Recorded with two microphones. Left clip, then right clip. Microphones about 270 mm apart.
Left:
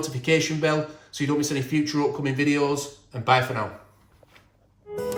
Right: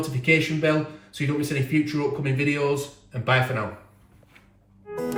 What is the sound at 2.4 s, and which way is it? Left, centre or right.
Speech, left.